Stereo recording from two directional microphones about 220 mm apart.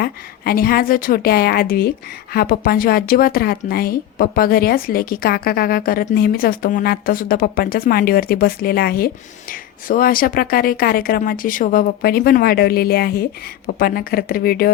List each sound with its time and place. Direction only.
0.0 s speech: 40° left (ahead or behind)